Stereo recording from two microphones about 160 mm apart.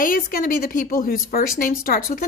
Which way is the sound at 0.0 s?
60° left (ahead or behind).